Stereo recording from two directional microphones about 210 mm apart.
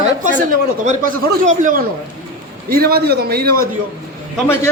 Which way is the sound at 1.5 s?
40° right (ahead or behind).